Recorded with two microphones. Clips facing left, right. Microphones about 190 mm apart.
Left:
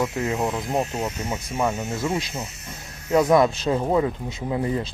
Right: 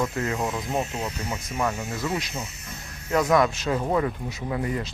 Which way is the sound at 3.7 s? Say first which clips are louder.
Left 3 dB; 15° left (ahead or behind).